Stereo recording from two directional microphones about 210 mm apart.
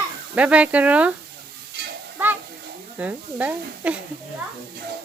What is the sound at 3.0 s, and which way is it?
Speech, 10° right (ahead or behind).